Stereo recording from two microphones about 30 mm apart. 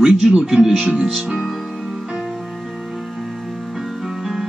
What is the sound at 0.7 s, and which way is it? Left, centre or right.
Speech, right.